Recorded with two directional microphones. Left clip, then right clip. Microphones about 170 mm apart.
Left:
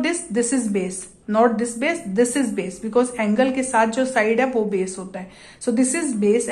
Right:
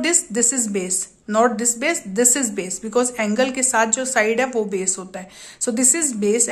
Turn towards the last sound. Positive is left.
turn(degrees=-25)  # may be behind; listen again after turning